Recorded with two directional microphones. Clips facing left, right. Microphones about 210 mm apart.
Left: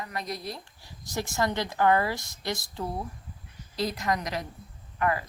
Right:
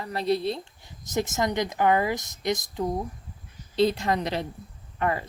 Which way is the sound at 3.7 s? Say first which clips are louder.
Right 6 dB; 25° right (ahead or behind).